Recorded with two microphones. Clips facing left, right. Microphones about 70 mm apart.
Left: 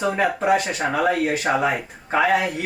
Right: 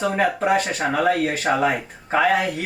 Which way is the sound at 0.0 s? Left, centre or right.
Centre.